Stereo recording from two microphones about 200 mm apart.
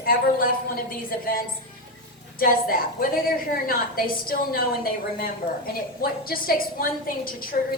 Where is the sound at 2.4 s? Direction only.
45° left (ahead or behind).